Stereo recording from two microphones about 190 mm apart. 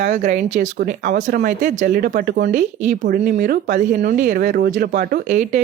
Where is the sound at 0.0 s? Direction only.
40° right (ahead or behind).